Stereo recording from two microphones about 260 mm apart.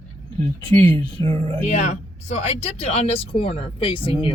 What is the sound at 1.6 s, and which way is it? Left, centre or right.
Speech, left.